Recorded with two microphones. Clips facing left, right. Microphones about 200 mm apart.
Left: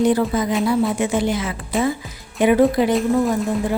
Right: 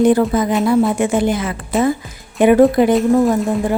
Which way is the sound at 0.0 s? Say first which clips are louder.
Right 4 dB; 50° right (ahead or behind).